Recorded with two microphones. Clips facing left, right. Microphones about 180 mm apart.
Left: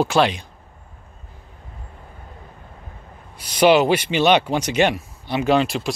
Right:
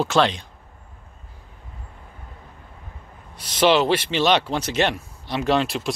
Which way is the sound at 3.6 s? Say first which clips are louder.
Left 3 dB; 10° left (ahead or behind).